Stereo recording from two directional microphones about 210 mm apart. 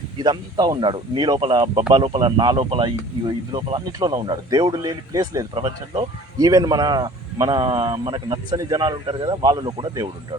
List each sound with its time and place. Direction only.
0.2 s speech: 20° right (ahead or behind)